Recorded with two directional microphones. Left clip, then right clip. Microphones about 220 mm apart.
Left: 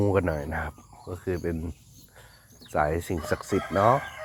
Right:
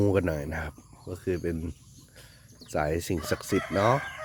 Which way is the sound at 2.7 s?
30° right (ahead or behind).